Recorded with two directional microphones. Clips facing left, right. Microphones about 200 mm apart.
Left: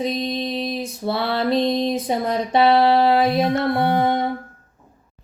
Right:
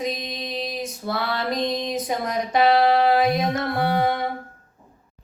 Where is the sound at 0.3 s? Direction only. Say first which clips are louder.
Left 6 dB; 30° left (ahead or behind).